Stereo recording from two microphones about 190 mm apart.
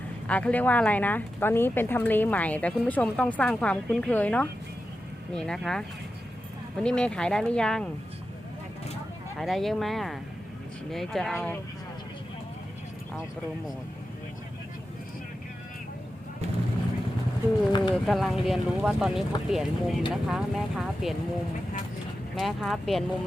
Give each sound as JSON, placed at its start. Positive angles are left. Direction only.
{"t": 0.3, "sound": "speech", "side_deg": 5}
{"t": 9.4, "sound": "speech", "side_deg": 0}
{"t": 17.7, "sound": "speech", "side_deg": 25}
{"t": 17.9, "sound": "speech", "side_deg": 0}
{"t": 22.4, "sound": "speech", "side_deg": 0}